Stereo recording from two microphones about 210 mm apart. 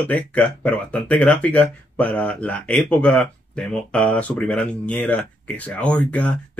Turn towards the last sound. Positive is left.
turn(degrees=5)  # may be behind; listen again after turning